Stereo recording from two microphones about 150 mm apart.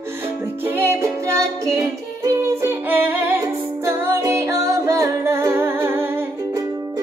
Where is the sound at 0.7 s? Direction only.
15° right (ahead or behind).